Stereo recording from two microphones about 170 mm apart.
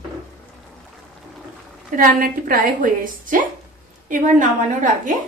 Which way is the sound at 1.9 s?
55° right (ahead or behind).